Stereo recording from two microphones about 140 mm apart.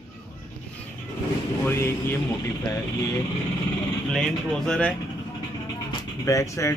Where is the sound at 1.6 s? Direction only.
15° left (ahead or behind).